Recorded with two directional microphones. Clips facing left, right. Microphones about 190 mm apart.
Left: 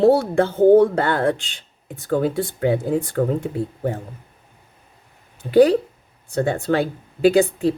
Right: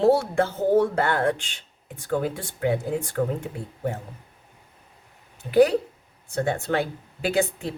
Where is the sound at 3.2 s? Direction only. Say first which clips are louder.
Left 4 dB; 45° left (ahead or behind).